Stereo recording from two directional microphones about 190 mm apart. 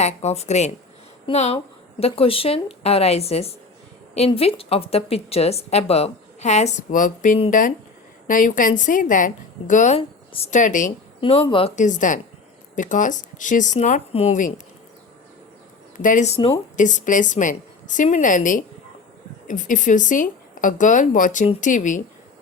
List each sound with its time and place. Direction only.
0.0 s a woman's voice: 35° left (ahead or behind)
11.2 s speech: 30° left (ahead or behind)
11.8 s a woman's voice: 40° left (ahead or behind)
16.0 s a woman's voice: 45° left (ahead or behind)
16.7 s a woman's voice: 40° left (ahead or behind)